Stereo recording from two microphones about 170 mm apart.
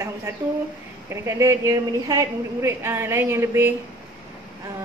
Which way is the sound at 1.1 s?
15° right (ahead or behind).